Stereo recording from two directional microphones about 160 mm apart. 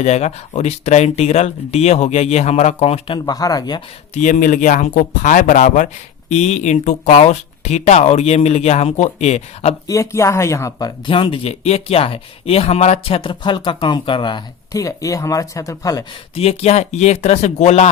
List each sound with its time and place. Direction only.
0.0 s speech: 40° left (ahead or behind)
3.2 s speech: 25° left (ahead or behind)
4.1 s speech: 50° left (ahead or behind)
9.8 s speech: 20° left (ahead or behind)
16.3 s speech: 40° left (ahead or behind)